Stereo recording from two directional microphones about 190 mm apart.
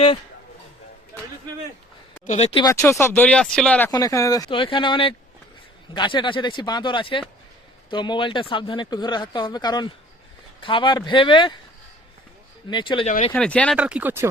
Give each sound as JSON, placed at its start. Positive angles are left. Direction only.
{"t": 2.2, "sound": "speech", "side_deg": 35}
{"t": 2.6, "sound": "speech", "side_deg": 15}
{"t": 12.7, "sound": "speech", "side_deg": 25}
{"t": 13.1, "sound": "speech", "side_deg": 40}
{"t": 13.3, "sound": "speech", "side_deg": 5}
{"t": 13.7, "sound": "speech", "side_deg": -5}